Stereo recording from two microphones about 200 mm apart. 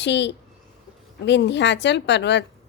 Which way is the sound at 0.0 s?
60° left (ahead or behind).